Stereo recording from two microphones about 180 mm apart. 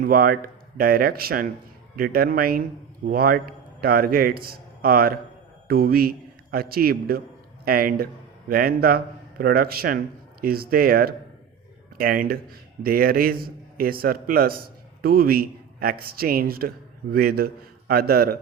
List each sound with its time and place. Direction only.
0.0 s a man's voice: 55° right (ahead or behind)